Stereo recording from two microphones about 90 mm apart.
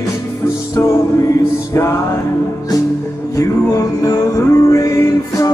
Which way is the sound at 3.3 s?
40° left (ahead or behind).